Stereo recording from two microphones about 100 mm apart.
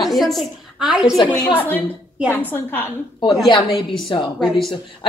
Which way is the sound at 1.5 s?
20° left (ahead or behind).